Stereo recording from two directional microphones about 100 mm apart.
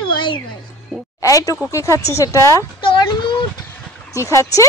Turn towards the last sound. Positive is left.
turn(degrees=30)  # may be behind; listen again after turning